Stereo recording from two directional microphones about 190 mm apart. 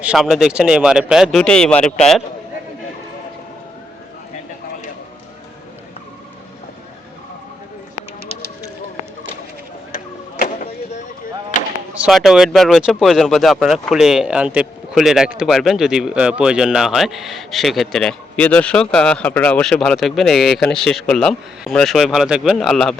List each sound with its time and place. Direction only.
0.0 s speech: 5° right (ahead or behind)
10.3 s a sound: 50° left (ahead or behind)
11.9 s speech: centre (ahead or behind)